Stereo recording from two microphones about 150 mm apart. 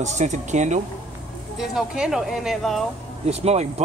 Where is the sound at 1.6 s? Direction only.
5° right (ahead or behind).